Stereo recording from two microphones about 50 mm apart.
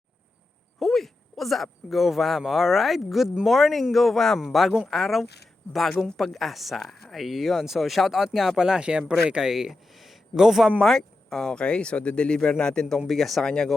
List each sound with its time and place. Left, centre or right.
0.8 s speech: centre
10.8 s speech: centre
13.1 s speech: centre